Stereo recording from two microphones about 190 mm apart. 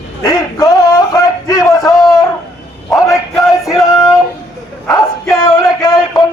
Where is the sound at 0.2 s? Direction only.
20° left (ahead or behind).